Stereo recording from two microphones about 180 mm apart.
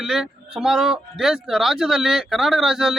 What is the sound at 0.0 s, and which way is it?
A man's voice, centre (ahead or behind).